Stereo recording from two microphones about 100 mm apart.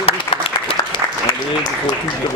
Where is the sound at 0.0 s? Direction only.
65° left (ahead or behind).